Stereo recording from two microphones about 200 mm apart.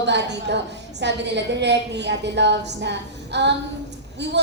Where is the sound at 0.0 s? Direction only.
60° right (ahead or behind).